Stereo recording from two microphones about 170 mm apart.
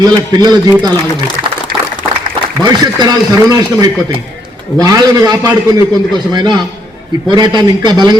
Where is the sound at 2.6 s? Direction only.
25° right (ahead or behind).